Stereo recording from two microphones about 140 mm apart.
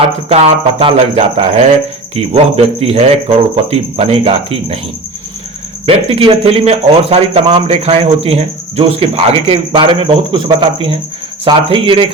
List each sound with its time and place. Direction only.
0.3 s speech: 40° right (ahead or behind)
5.8 s speech: 45° right (ahead or behind)